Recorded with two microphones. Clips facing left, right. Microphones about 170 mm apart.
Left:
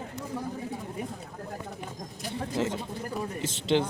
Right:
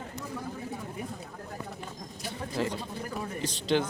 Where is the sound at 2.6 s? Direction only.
20° left (ahead or behind).